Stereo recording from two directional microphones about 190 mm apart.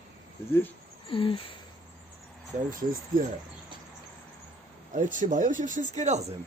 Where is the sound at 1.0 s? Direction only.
25° left (ahead or behind).